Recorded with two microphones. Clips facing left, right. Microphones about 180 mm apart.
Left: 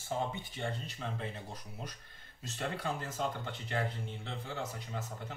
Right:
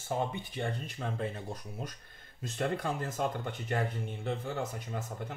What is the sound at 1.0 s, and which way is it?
Speech, 50° right (ahead or behind).